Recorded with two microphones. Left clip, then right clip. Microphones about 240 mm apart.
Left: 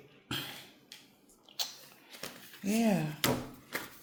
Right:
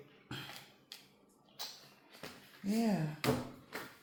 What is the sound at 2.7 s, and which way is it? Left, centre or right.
Speech, left.